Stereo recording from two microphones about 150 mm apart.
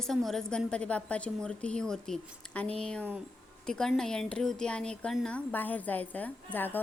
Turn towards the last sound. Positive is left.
turn(degrees=15)  # may be behind; listen again after turning